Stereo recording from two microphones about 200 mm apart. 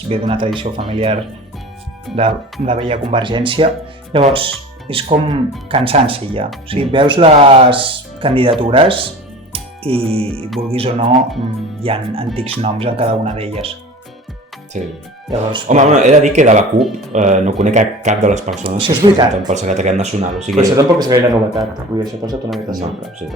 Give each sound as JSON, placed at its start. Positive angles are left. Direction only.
{"t": 0.1, "sound": "speech", "side_deg": -25}
{"t": 14.8, "sound": "speech", "side_deg": -40}
{"t": 16.7, "sound": "speech", "side_deg": 0}
{"t": 17.1, "sound": "speech", "side_deg": -35}
{"t": 19.5, "sound": "speech", "side_deg": -35}
{"t": 20.6, "sound": "speech", "side_deg": -15}